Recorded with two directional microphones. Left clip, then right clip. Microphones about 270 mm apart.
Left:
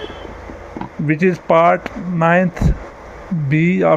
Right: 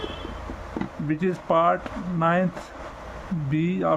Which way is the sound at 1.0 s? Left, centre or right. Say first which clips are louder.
Left 10 dB; left.